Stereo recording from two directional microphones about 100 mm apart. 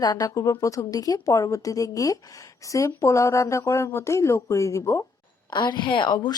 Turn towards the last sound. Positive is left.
turn(degrees=45)  # may be behind; listen again after turning